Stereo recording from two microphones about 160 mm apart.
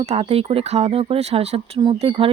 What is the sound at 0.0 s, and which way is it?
Speech, 40° right (ahead or behind).